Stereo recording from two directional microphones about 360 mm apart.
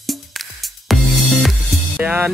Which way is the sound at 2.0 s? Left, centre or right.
Centre.